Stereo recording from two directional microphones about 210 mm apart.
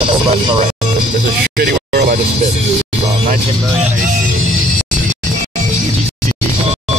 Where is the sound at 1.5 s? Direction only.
45° right (ahead or behind).